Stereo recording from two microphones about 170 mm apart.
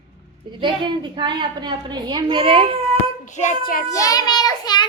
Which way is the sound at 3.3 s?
45° left (ahead or behind).